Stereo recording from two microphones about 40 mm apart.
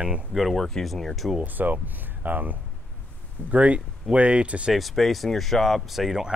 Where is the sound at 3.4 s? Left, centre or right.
Right.